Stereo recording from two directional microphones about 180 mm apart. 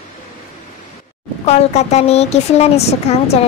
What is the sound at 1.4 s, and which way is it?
Speech, 40° left (ahead or behind).